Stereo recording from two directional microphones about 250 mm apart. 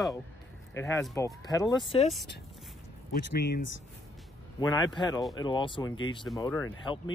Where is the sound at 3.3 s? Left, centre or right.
Left.